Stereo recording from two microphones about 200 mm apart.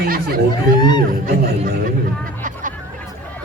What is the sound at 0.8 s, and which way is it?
Speech, 20° left (ahead or behind).